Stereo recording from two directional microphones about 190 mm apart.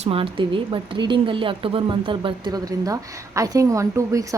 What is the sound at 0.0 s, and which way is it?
A woman's voice, 30° right (ahead or behind).